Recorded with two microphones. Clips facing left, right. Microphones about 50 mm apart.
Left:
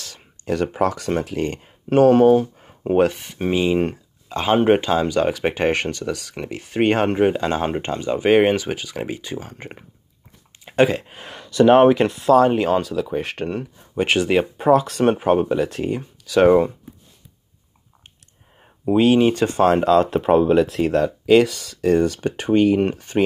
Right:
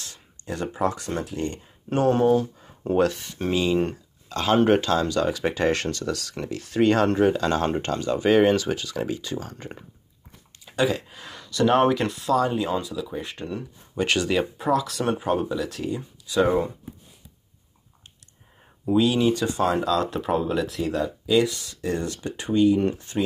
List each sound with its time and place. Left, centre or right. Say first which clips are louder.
0.7 s speech: left 5 dB; left
2.2 s speech: left 6 dB; left
5.2 s speech: left 4 dB; left
5.7 s speech: left 3 dB; left
10.6 s speech: left 6 dB; left
12.3 s speech: left 8 dB; left
13.1 s speech: left 8 dB; left
13.9 s speech: left 5 dB; left
16.3 s speech: left 7 dB; left
18.9 s speech: left 5 dB; left
22.2 s speech: left 4 dB; left